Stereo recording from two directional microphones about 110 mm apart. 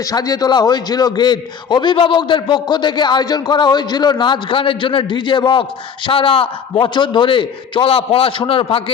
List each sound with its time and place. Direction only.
0.0 s a man's voice: 35° left (ahead or behind); by 8.8 s 55° left (ahead or behind)